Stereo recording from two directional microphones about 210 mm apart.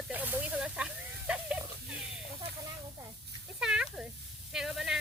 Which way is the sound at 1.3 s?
5° right (ahead or behind).